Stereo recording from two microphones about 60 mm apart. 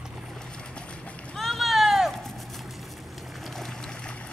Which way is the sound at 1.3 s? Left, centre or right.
Centre.